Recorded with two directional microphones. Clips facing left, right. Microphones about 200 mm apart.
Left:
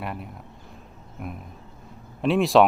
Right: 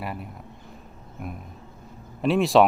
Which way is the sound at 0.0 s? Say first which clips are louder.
Even; centre (ahead or behind).